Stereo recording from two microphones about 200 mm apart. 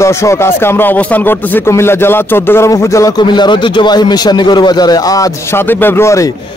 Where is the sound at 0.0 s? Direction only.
15° left (ahead or behind).